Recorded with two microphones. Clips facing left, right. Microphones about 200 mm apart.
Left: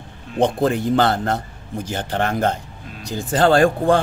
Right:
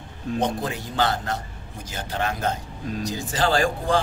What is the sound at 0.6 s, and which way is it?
A man's voice, 55° left (ahead or behind).